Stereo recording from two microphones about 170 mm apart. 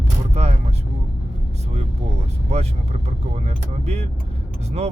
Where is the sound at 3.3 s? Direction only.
40° right (ahead or behind).